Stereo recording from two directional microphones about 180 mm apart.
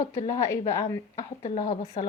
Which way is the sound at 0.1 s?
40° left (ahead or behind).